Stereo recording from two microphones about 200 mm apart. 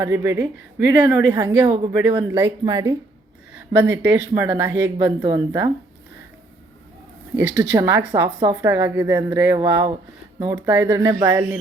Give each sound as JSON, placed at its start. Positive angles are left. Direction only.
{"t": 0.0, "sound": "a woman's voice", "side_deg": -15}
{"t": 7.3, "sound": "a woman's voice", "side_deg": -5}